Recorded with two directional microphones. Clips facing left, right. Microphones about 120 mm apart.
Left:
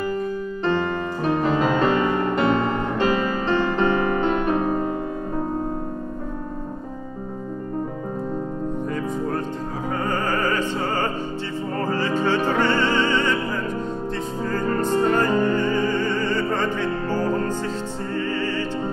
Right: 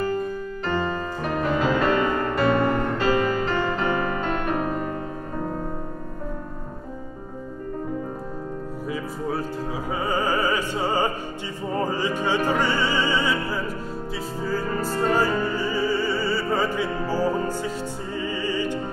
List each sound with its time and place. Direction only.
0.7 s music: 25° left (ahead or behind)
10.0 s music: 10° right (ahead or behind)
14.5 s music: 5° right (ahead or behind)